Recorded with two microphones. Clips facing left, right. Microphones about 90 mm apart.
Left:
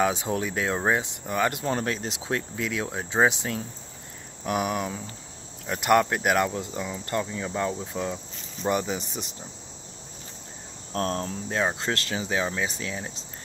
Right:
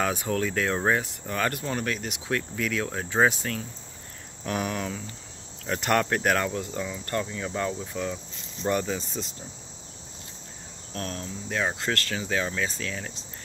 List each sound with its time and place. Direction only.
0.0 s speech: 20° left (ahead or behind)
1.7 s speech: 30° left (ahead or behind)
10.9 s speech: 40° left (ahead or behind)
11.4 s speech: 25° left (ahead or behind)